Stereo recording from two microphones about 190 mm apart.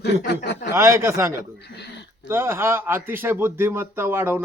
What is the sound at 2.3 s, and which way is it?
Speech, 15° right (ahead or behind).